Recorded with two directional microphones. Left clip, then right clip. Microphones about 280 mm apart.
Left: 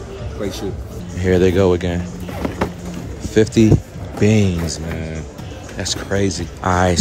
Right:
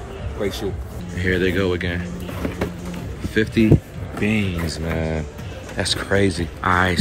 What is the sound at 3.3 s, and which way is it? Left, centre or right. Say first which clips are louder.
Speech: left 5 dB; centre.